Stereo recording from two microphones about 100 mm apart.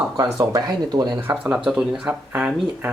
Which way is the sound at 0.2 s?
40° right (ahead or behind).